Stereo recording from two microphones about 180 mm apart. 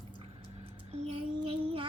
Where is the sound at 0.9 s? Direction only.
35° right (ahead or behind).